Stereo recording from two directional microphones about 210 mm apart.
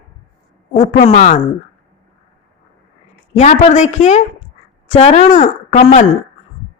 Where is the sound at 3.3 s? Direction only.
30° left (ahead or behind).